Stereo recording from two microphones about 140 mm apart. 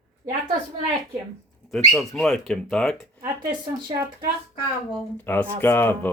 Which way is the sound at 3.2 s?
30° right (ahead or behind).